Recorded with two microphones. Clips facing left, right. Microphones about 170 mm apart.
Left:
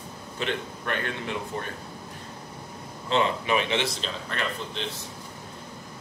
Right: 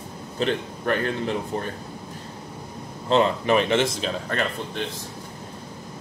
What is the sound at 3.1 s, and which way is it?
A man's voice, 40° right (ahead or behind).